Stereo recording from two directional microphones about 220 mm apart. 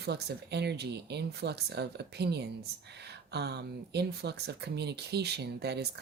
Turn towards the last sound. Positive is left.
turn(degrees=-50)  # may be behind; listen again after turning